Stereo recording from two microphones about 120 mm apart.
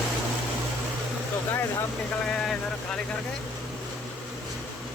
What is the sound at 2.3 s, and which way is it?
Speech, 5° left (ahead or behind).